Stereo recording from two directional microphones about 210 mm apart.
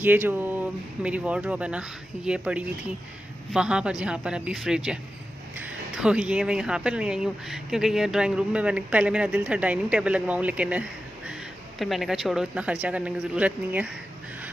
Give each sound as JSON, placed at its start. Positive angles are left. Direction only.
{"t": 0.0, "sound": "speech", "side_deg": -10}